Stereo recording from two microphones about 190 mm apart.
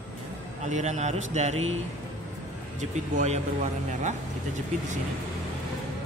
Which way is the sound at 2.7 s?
40° right (ahead or behind).